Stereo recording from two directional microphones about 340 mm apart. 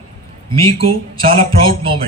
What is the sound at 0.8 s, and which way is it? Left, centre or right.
A man's voice, centre.